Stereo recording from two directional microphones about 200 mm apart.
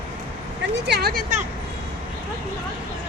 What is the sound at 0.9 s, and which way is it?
Speech, 55° right (ahead or behind).